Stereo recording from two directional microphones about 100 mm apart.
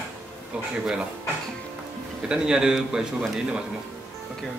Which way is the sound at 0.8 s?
10° right (ahead or behind).